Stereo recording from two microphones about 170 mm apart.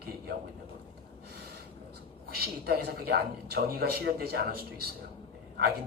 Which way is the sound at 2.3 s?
65° right (ahead or behind).